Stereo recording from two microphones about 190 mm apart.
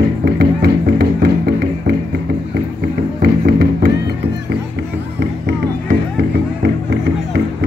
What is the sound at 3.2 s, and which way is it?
Music, 55° right (ahead or behind).